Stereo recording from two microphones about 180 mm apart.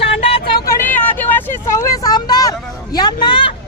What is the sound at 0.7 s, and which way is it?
Vehicle, 10° left (ahead or behind).